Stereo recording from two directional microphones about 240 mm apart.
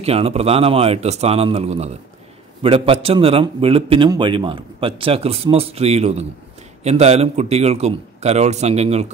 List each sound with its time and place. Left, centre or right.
0.0 s a man's voice: right